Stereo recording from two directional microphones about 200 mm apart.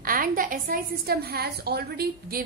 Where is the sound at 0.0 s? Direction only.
45° right (ahead or behind).